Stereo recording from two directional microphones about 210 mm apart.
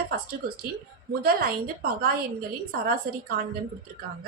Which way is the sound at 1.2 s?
45° right (ahead or behind).